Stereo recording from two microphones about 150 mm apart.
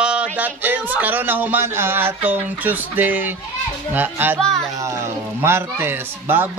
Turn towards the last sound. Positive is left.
turn(degrees=-15)  # may be behind; listen again after turning